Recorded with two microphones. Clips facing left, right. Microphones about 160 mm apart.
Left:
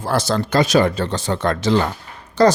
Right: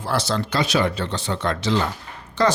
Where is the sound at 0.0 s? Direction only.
45° left (ahead or behind).